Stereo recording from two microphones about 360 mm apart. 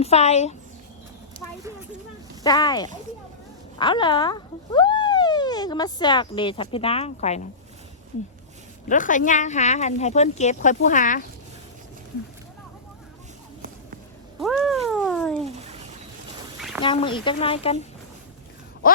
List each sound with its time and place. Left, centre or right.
0.0 s speech: centre
2.4 s speech: centre
8.9 s speech: left
14.4 s cat: centre
15.4 s a sound: centre
16.6 s a sound: centre
16.8 s speech: centre